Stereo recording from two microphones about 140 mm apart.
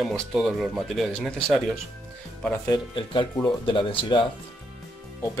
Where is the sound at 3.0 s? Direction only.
35° left (ahead or behind).